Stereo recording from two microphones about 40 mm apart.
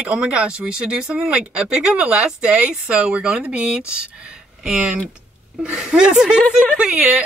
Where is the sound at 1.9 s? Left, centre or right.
Right.